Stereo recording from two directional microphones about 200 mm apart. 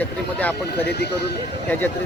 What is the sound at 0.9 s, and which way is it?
Speech, 55° left (ahead or behind).